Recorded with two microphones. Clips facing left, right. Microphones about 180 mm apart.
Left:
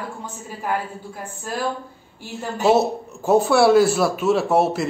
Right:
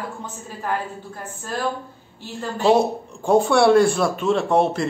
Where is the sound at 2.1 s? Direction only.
5° left (ahead or behind).